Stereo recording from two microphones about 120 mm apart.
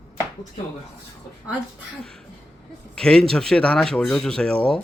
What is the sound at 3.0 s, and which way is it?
Speech, 5° left (ahead or behind).